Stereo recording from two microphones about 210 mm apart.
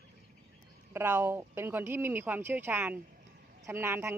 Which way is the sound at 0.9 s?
10° right (ahead or behind).